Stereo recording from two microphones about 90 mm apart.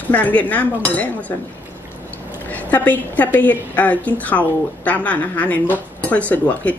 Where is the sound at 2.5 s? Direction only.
20° left (ahead or behind).